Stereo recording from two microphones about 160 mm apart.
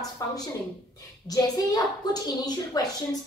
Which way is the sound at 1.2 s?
25° left (ahead or behind).